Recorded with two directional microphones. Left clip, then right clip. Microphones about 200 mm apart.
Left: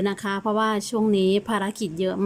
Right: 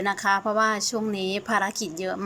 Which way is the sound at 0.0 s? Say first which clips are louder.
Right 3 dB; 30° left (ahead or behind).